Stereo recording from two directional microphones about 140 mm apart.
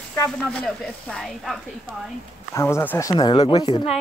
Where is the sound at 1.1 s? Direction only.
Centre (ahead or behind).